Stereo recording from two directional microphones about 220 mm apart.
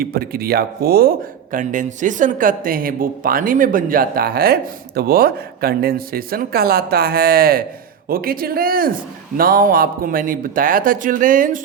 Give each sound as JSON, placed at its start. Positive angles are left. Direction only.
{"t": 0.0, "sound": "speech", "side_deg": -40}